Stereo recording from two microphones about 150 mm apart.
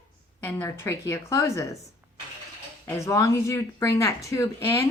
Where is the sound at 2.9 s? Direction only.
20° left (ahead or behind).